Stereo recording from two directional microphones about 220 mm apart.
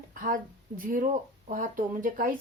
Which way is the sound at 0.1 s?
40° right (ahead or behind).